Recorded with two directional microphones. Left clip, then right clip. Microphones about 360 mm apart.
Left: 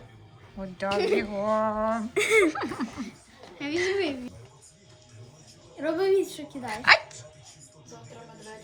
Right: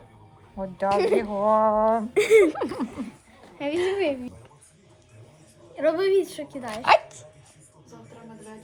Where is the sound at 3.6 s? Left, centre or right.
Centre.